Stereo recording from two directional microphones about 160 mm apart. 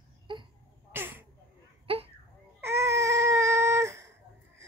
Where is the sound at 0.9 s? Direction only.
15° right (ahead or behind).